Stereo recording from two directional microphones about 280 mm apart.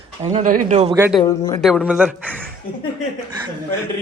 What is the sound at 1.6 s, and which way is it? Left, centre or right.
Speech, centre.